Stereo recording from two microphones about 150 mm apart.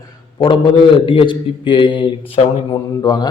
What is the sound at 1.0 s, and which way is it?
A man's voice, 35° left (ahead or behind).